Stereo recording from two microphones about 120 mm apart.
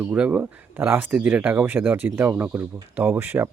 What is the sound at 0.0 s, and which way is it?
Speech, 10° right (ahead or behind).